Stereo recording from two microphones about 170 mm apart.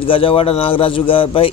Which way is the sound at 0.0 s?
30° left (ahead or behind).